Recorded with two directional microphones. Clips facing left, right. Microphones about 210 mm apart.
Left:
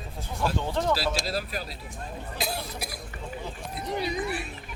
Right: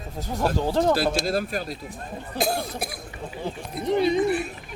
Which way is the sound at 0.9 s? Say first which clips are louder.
Right 5 dB; 50° right (ahead or behind).